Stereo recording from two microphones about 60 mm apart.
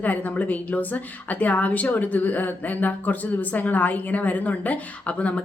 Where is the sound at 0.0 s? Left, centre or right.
Left.